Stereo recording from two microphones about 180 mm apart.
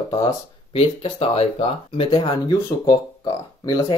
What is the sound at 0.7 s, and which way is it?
Speech, 30° left (ahead or behind).